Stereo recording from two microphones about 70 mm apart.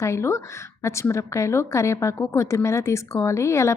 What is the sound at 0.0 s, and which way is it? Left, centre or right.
A woman's voice, left.